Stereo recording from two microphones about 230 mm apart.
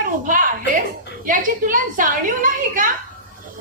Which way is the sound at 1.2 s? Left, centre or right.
Right.